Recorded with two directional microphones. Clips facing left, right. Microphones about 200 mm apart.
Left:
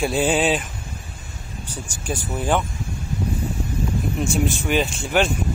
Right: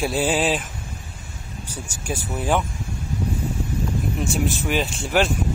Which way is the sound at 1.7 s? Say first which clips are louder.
Left 1 dB; 5° right (ahead or behind).